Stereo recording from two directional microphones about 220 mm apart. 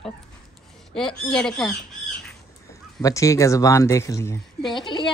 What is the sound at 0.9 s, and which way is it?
Speech, centre (ahead or behind).